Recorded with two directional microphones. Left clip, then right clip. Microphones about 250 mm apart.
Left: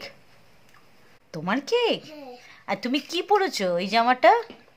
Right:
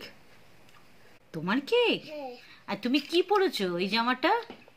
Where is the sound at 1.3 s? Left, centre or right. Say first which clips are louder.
Left 3 dB; centre.